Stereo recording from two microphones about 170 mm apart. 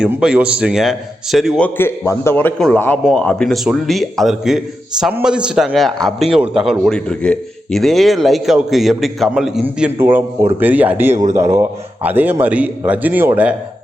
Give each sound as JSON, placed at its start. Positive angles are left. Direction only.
{"t": 0.0, "sound": "a man's voice", "side_deg": -5}
{"t": 2.6, "sound": "a man's voice", "side_deg": 0}
{"t": 11.1, "sound": "speech", "side_deg": -45}
{"t": 11.5, "sound": "a man's voice", "side_deg": -15}